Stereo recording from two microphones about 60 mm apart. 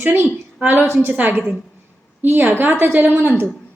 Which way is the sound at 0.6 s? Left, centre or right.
Right.